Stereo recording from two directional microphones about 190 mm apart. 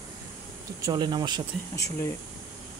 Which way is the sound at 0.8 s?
20° right (ahead or behind).